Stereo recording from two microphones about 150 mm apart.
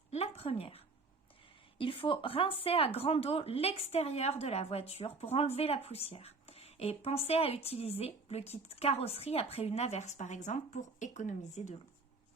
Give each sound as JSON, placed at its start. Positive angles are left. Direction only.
{"t": 0.1, "sound": "speech", "side_deg": 45}
{"t": 1.8, "sound": "speech", "side_deg": 35}